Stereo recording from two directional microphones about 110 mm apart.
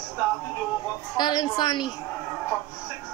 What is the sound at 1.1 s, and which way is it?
Speech, 40° left (ahead or behind).